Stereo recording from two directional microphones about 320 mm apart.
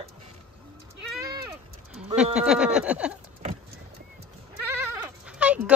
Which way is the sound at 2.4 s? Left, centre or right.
Centre.